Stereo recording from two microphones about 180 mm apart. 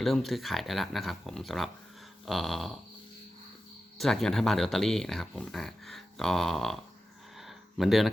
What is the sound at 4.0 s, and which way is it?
Speech, centre (ahead or behind).